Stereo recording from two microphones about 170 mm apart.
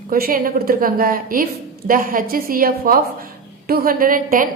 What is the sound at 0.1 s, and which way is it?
A woman's voice, 55° right (ahead or behind).